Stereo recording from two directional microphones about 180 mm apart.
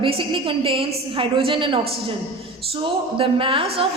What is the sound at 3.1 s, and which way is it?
Speech, 30° right (ahead or behind).